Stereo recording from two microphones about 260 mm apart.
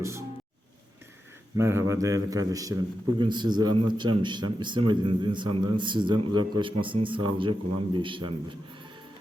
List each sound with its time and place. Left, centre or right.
0.0 s music: centre
1.5 s a man's voice: centre